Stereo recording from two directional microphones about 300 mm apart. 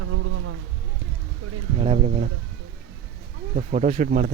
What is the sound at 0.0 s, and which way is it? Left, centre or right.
Insect, right.